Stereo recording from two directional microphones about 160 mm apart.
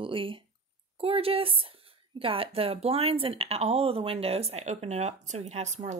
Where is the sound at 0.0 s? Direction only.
35° right (ahead or behind).